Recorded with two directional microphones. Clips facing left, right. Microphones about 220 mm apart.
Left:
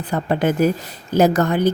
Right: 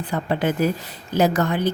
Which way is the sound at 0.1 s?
45° left (ahead or behind).